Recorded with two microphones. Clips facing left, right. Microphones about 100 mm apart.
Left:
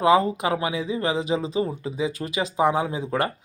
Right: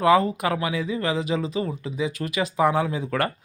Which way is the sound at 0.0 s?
25° left (ahead or behind).